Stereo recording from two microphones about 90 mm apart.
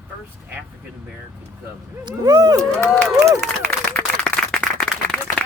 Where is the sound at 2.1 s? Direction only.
45° right (ahead or behind).